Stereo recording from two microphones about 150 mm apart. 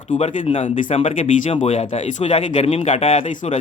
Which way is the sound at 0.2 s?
45° left (ahead or behind).